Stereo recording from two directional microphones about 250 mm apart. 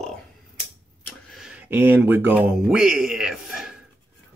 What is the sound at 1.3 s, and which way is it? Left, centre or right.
Speech, centre.